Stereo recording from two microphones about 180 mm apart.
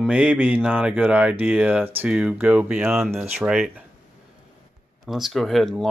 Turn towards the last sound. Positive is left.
turn(degrees=0)  # may be behind; listen again after turning